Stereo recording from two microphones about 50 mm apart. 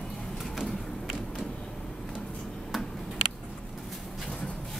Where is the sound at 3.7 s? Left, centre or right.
Centre.